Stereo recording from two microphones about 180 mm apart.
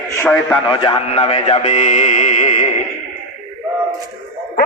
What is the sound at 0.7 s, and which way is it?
Speech, 30° left (ahead or behind).